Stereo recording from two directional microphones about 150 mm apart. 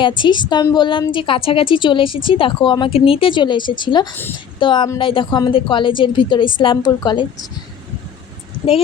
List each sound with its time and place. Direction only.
0.2 s speech: 30° left (ahead or behind)